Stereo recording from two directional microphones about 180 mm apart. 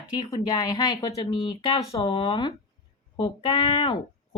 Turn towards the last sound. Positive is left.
turn(degrees=30)  # may be behind; listen again after turning